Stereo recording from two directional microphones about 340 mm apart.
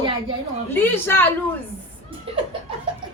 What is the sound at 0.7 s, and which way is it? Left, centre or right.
Speech, centre.